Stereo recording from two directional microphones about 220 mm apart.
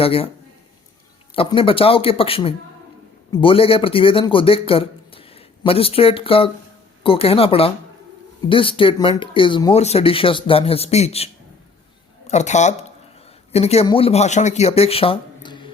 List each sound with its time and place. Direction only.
0.0 s speech: 25° left (ahead or behind)
1.4 s speech: 25° left (ahead or behind)
12.3 s speech: 30° left (ahead or behind)